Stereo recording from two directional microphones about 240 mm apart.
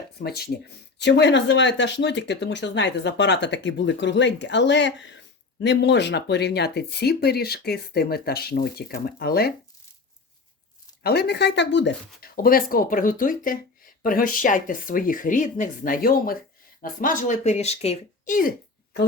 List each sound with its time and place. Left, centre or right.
0.2 s speech: left
11.0 s speech: left